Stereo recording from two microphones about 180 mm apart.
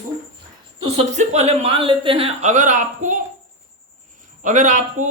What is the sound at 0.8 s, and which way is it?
Speech, 35° right (ahead or behind).